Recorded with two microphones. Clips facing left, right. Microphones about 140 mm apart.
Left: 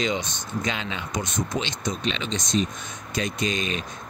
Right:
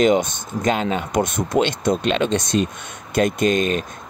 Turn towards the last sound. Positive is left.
turn(degrees=-50)  # may be behind; listen again after turning